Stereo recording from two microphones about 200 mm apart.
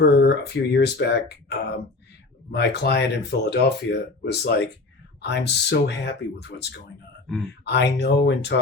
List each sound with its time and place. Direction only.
0.0 s speech: 55° left (ahead or behind)
7.6 s speech: 55° left (ahead or behind)